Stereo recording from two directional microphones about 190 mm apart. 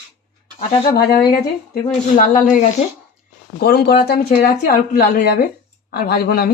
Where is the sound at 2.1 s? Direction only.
45° left (ahead or behind).